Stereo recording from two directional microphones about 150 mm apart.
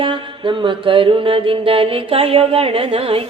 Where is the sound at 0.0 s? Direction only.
35° right (ahead or behind).